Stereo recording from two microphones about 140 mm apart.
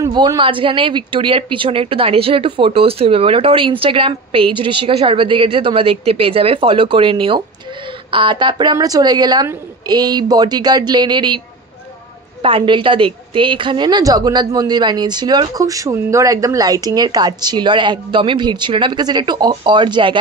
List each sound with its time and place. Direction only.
0.0 s a woman's voice: 30° right (ahead or behind)